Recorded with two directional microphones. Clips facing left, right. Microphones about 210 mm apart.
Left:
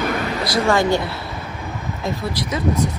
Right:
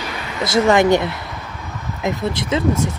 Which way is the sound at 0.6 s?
20° right (ahead or behind).